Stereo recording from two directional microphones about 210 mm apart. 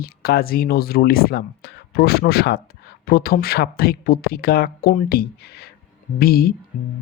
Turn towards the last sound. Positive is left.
turn(degrees=45)  # may be behind; listen again after turning